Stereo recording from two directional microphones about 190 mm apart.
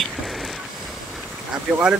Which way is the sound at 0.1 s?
Centre (ahead or behind).